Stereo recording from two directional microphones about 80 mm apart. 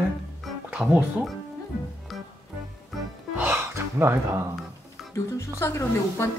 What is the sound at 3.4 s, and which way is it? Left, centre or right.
Gasp, right.